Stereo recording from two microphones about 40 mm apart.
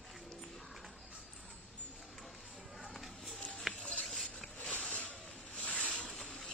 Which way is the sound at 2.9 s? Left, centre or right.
Centre.